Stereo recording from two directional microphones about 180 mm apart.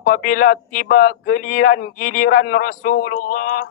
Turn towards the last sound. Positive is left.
turn(degrees=50)  # may be behind; listen again after turning